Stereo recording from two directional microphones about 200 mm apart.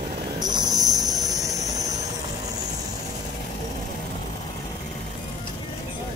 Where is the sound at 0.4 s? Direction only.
20° right (ahead or behind).